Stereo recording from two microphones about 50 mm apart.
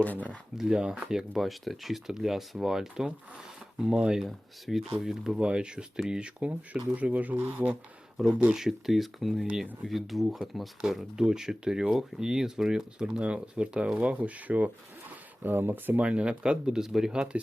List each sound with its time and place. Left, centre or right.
0.0 s speech: left
0.5 s speech: centre
4.2 s speech: centre; by 7.8 s right
8.2 s speech: centre; by 14.7 s right
15.4 s speech: right
16.0 s speech: right
17.3 s speech: right